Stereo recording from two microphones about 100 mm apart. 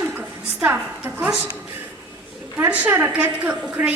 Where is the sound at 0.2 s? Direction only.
20° right (ahead or behind).